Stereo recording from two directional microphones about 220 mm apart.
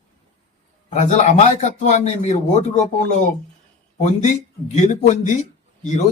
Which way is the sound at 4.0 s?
35° left (ahead or behind).